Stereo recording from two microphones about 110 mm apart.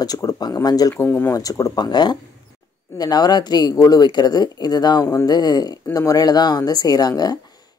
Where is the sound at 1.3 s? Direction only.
30° left (ahead or behind).